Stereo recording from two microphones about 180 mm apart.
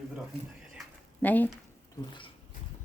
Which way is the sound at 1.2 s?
10° left (ahead or behind).